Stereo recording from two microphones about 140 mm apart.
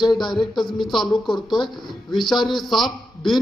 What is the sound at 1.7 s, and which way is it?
A man's voice, centre (ahead or behind).